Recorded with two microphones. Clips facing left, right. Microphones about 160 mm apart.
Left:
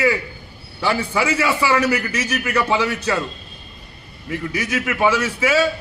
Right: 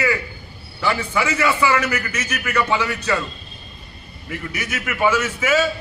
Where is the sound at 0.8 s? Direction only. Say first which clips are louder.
Left 1 dB; 30° left (ahead or behind).